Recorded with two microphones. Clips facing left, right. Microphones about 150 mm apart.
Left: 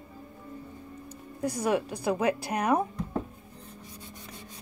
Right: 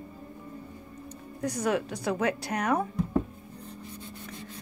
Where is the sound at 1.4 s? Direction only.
10° left (ahead or behind).